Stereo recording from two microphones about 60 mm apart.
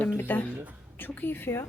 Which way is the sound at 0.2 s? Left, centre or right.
Left.